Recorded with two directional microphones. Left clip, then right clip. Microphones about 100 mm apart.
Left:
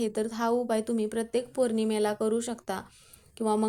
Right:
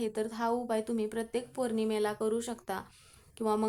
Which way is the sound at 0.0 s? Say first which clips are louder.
Left 4 dB; 35° left (ahead or behind).